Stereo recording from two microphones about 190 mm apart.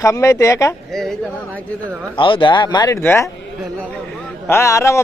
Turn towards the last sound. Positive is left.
turn(degrees=15)  # may be behind; listen again after turning